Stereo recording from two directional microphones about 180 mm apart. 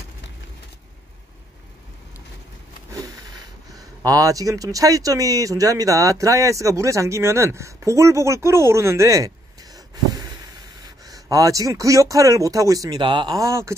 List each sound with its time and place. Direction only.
2.9 s speech: 20° right (ahead or behind)